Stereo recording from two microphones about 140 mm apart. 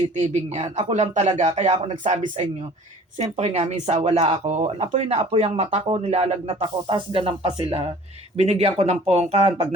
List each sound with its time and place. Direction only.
0.2 s speech: 50° right (ahead or behind)